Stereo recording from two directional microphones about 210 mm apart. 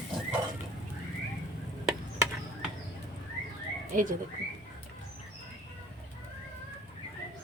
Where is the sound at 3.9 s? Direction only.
40° right (ahead or behind).